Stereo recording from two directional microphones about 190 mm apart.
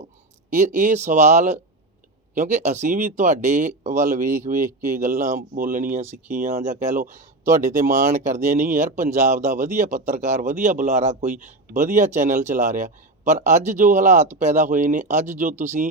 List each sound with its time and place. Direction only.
0.5 s speech: 40° right (ahead or behind)
7.4 s speech: 15° right (ahead or behind)
7.7 s speech: 40° right (ahead or behind)